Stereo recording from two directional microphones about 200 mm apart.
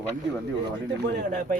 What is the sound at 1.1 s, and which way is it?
Speech, 45° right (ahead or behind).